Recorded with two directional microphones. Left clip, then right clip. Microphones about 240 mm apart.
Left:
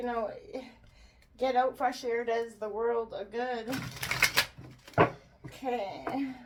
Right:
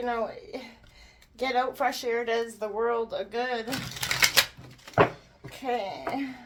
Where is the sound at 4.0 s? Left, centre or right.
Centre.